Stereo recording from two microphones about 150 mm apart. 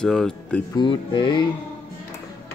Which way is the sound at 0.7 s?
30° left (ahead or behind).